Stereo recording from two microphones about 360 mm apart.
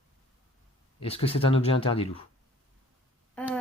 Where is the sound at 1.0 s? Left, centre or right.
Centre.